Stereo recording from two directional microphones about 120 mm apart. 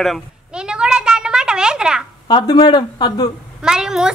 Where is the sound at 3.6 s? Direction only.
5° right (ahead or behind).